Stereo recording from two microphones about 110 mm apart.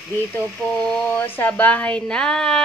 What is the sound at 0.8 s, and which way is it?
Speech, 15° left (ahead or behind).